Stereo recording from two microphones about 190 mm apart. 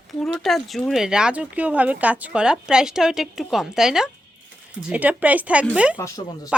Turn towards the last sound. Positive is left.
turn(degrees=15)  # may be behind; listen again after turning